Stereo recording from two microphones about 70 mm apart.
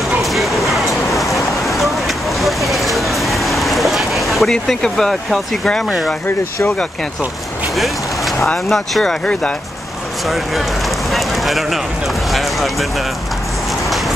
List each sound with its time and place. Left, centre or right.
0.2 s a sound: centre
7.7 s vehicle: centre
8.6 s speech: centre
10.2 s speech: centre
11.1 s a sound: centre
12.3 s speech: centre
13.8 s music: centre